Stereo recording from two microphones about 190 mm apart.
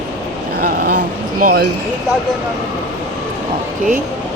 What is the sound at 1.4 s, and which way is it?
Speech, 55° right (ahead or behind).